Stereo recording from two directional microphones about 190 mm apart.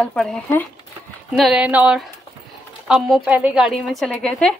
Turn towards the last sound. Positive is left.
turn(degrees=0)  # may be behind; listen again after turning